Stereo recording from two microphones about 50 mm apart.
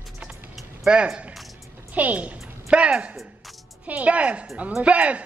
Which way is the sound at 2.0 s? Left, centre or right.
Right.